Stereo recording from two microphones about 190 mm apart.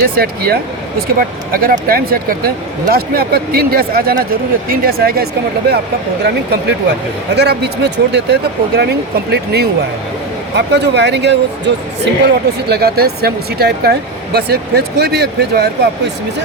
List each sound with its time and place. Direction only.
0.0 s speech: 55° right (ahead or behind)
12.5 s speech: 60° right (ahead or behind)